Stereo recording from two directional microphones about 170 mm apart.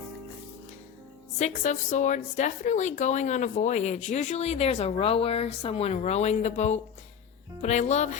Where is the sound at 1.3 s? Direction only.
45° left (ahead or behind).